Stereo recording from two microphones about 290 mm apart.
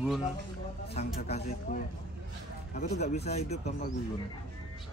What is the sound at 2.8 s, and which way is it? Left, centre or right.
Speech, left.